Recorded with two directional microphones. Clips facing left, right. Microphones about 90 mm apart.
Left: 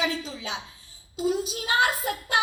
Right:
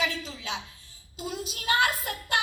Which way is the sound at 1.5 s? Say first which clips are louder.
Left 2 dB; 25° left (ahead or behind).